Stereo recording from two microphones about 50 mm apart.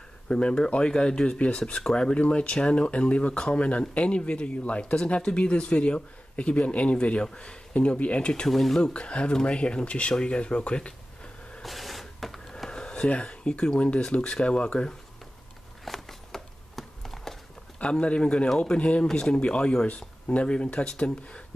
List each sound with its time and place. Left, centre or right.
0.3 s speech: centre
8.5 s speech: centre
8.9 s speech: left
11.6 s printer: centre
12.6 s a sound: centre
13.1 s speech: left
15.8 s a sound: centre
17.7 s speech: left